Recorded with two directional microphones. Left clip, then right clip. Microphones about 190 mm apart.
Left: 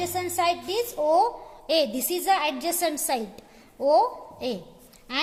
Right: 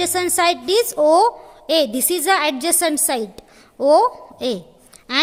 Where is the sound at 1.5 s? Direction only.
35° right (ahead or behind).